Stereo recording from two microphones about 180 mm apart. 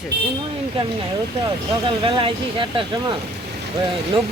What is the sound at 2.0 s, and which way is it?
Speech, 30° right (ahead or behind).